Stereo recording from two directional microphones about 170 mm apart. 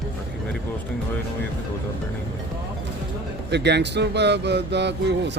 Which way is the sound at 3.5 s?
85° right.